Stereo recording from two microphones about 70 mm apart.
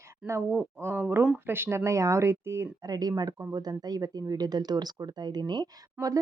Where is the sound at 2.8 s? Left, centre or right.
Right.